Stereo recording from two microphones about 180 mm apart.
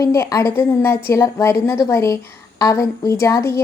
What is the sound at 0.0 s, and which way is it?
A woman's voice, 20° left (ahead or behind).